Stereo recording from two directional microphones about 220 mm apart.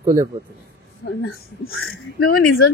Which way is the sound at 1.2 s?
70° left (ahead or behind).